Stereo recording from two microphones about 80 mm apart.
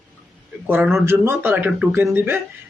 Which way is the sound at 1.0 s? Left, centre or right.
Right.